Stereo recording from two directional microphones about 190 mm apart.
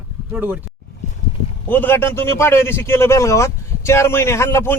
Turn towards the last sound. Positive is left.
turn(degrees=15)  # may be behind; listen again after turning